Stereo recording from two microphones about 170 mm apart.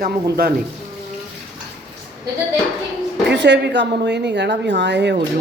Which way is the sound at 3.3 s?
90° right.